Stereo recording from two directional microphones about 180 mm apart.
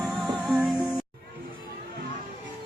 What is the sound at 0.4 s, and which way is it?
Music, 5° right (ahead or behind).